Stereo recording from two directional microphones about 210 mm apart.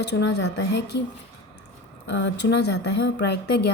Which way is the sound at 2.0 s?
60° left (ahead or behind).